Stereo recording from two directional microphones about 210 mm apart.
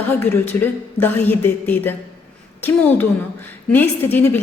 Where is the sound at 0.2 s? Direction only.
10° left (ahead or behind).